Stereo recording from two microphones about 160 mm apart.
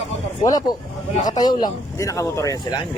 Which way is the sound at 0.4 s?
25° left (ahead or behind).